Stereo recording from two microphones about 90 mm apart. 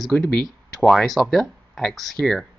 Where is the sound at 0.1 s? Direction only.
15° left (ahead or behind).